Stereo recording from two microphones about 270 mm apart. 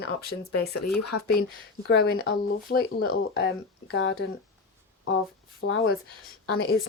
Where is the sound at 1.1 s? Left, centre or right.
Left.